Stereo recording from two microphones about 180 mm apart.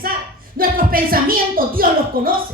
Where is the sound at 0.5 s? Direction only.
55° right (ahead or behind).